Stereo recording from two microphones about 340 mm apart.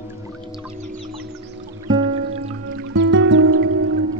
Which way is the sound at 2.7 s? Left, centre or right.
Right.